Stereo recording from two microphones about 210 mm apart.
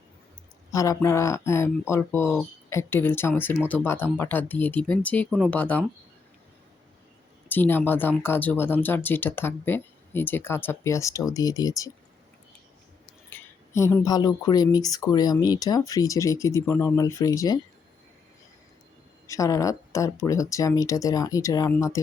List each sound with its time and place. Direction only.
0.7 s speech: 15° left (ahead or behind)
7.4 s speech: 10° left (ahead or behind)
13.3 s speech: 10° left (ahead or behind)
19.3 s speech: 15° left (ahead or behind)